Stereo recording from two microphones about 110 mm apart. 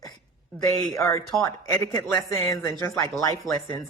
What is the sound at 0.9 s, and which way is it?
Speech, 30° left (ahead or behind).